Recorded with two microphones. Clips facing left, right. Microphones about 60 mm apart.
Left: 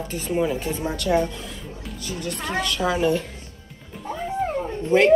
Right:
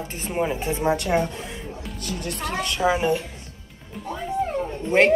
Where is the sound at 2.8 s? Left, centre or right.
Centre.